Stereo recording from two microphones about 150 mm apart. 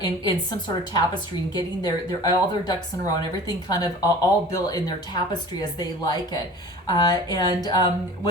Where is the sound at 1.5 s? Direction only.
25° left (ahead or behind).